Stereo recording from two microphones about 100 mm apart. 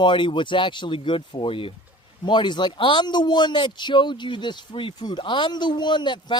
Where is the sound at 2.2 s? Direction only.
50° left (ahead or behind).